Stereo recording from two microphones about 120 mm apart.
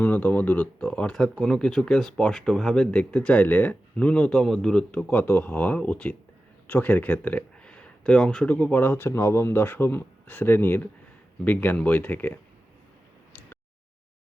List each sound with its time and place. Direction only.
0.0 s speech: 15° left (ahead or behind)